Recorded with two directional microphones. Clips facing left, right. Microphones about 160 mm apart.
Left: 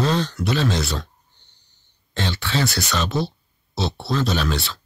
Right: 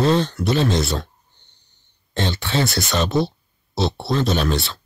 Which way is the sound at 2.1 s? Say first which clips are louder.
Right 3 dB; 50° right (ahead or behind).